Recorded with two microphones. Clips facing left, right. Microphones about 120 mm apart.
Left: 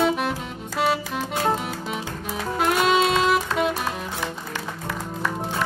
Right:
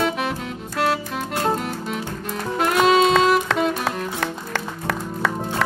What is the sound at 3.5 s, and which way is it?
Music, 80° right.